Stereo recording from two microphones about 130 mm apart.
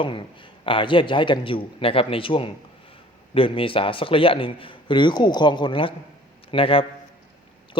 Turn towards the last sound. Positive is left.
turn(degrees=40)  # may be behind; listen again after turning